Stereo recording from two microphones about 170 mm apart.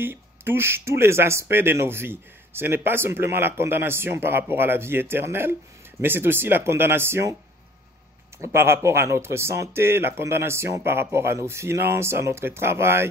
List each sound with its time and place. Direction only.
0.0 s speech: 15° right (ahead or behind)
8.4 s speech: 15° right (ahead or behind)